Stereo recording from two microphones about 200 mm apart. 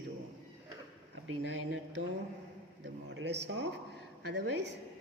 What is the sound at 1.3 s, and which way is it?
A woman's voice, 65° right (ahead or behind).